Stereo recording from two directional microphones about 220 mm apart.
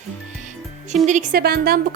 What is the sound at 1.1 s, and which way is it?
Speech, 40° right (ahead or behind).